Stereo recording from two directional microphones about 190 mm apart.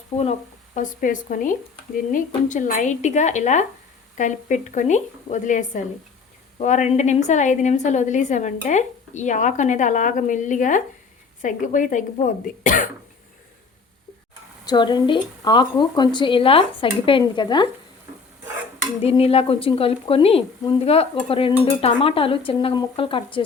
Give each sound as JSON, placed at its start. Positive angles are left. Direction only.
{"t": 0.2, "sound": "a woman's voice", "side_deg": 35}
{"t": 14.7, "sound": "speech", "side_deg": 25}
{"t": 19.0, "sound": "speech", "side_deg": 30}